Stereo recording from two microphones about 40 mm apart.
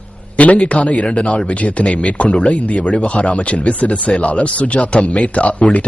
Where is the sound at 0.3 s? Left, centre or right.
Left.